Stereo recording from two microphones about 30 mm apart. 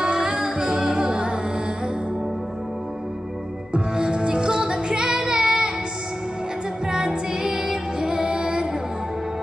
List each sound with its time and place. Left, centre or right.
0.0 s music: right
3.7 s music: right
5.3 s female singing: right
6.9 s music: right